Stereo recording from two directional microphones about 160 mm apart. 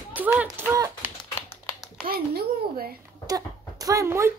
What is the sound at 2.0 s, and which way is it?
Speech, 70° right (ahead or behind).